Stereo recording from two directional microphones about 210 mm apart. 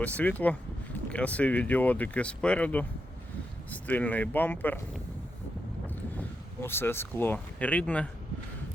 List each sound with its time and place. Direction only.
0.0 s speech: 5° left (ahead or behind)
5.9 s speech: 10° left (ahead or behind)